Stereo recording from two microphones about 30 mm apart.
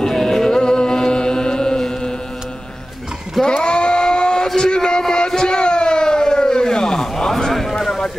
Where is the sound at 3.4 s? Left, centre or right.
Left.